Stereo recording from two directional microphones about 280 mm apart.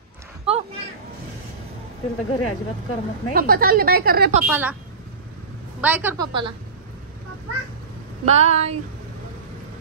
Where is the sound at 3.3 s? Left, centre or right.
Right.